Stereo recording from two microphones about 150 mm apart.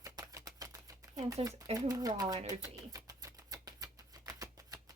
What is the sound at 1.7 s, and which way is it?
Speech, 25° right (ahead or behind).